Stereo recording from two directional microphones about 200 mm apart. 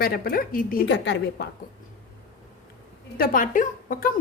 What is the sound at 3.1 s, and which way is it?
Speech, 45° left (ahead or behind).